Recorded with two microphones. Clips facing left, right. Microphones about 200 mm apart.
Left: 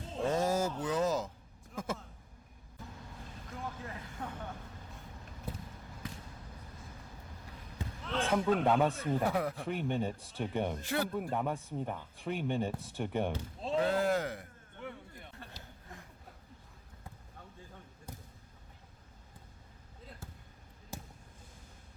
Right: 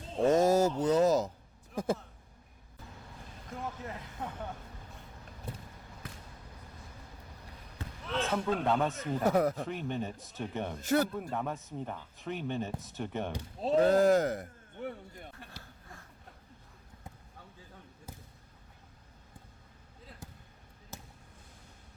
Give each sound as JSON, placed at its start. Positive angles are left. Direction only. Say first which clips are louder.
{"t": 0.2, "sound": "speech", "louder": "right 6 dB", "side_deg": -40}
{"t": 7.8, "sound": "speech", "louder": "right 1 dB", "side_deg": 10}
{"t": 9.2, "sound": "speech", "louder": "right 10 dB", "side_deg": -40}
{"t": 9.6, "sound": "speech", "louder": "left 2 dB", "side_deg": 15}
{"t": 10.8, "sound": "speech", "louder": "right 6 dB", "side_deg": -45}
{"t": 11.2, "sound": "speech", "louder": "left 1 dB", "side_deg": 15}
{"t": 13.6, "sound": "speech", "louder": "right 7 dB", "side_deg": -45}
{"t": 20.9, "sound": "basketball bounce", "louder": "left 3 dB", "side_deg": 15}